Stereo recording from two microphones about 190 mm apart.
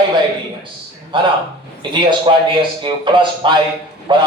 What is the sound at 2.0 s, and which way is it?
Speech, 25° right (ahead or behind).